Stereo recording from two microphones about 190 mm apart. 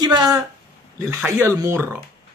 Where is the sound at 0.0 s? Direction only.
20° right (ahead or behind).